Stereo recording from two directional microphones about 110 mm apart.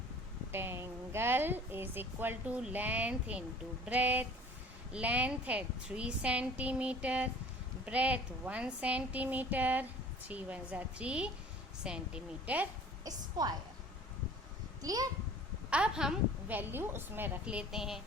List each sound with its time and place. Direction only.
0.5 s a woman's voice: 20° right (ahead or behind)
13.1 s a woman's voice: 40° right (ahead or behind)
14.8 s a child's voice: 35° right (ahead or behind)
15.7 s a woman's voice: 5° right (ahead or behind)
16.6 s a woman's voice: 20° right (ahead or behind); by 18.0 s 5° right (ahead or behind)